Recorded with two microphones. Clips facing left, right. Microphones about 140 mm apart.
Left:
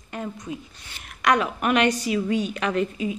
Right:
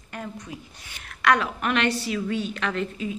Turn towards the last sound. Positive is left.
turn(degrees=15)  # may be behind; listen again after turning